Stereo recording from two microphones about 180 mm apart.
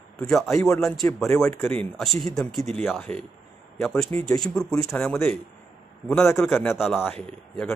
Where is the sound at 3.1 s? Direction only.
35° right (ahead or behind).